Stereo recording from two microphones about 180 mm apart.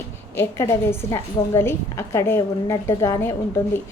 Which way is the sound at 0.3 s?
15° left (ahead or behind).